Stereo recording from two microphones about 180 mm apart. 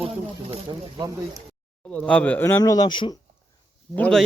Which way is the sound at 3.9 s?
5° left (ahead or behind).